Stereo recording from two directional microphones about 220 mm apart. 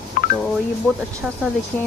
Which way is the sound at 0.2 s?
40° left (ahead or behind).